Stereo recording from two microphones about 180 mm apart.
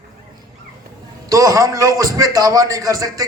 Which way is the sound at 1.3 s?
20° right (ahead or behind).